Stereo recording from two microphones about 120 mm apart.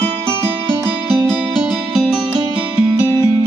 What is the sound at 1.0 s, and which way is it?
Music, 5° left (ahead or behind).